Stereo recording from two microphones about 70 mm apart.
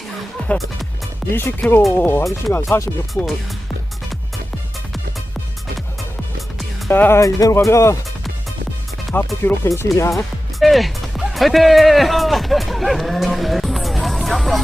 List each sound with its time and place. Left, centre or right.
0.3 s music: centre
1.3 s speech: left
2.5 s speech: left
3.2 s speech: centre
6.9 s speech: left
7.2 s speech: left
9.1 s speech: left
9.6 s speech: left
10.6 s music: centre